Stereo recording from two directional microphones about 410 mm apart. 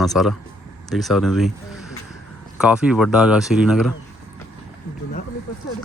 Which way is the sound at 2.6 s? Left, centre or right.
Centre.